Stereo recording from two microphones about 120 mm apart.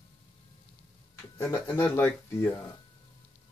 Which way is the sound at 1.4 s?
20° left (ahead or behind).